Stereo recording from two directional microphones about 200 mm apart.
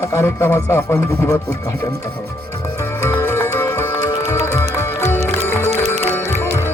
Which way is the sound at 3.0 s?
10° left (ahead or behind).